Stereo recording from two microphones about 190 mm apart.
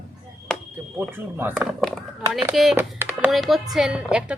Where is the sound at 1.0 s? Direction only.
10° right (ahead or behind).